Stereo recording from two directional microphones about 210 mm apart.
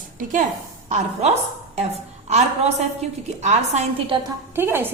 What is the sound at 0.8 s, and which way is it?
A woman's voice, 30° right (ahead or behind).